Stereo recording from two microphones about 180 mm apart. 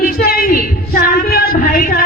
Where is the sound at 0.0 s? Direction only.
60° left (ahead or behind).